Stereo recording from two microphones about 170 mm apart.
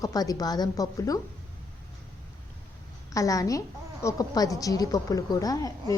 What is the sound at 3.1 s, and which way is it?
A woman's voice, 20° left (ahead or behind).